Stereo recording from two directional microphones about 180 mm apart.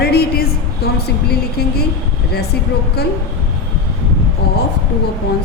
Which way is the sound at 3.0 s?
60° left (ahead or behind).